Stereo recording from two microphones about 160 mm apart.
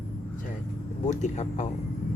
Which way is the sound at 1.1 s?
45° left (ahead or behind).